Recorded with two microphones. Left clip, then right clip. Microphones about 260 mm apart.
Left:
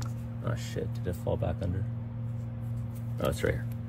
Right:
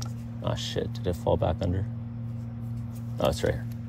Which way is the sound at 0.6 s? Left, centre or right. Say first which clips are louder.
Right 6 dB; centre.